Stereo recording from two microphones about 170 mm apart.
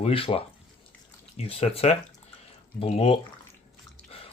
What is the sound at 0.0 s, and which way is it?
Speech, 35° left (ahead or behind).